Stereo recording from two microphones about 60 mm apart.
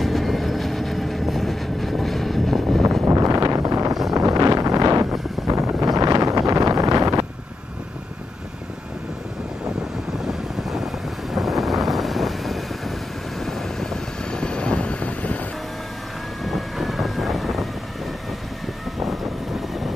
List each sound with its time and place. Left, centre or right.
0.0 s vehicle: centre
3.1 s wind noise: right
3.5 s vehicle: right
4.1 s wind noise: right
5.9 s wind noise: right
11.3 s vehicle: centre; by 15.3 s left
16.4 s vehicle: centre
18.9 s vehicle: centre